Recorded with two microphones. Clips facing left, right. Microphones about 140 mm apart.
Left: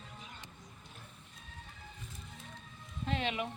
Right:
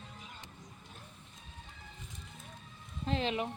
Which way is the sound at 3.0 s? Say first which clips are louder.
Right 2 dB; 35° right (ahead or behind).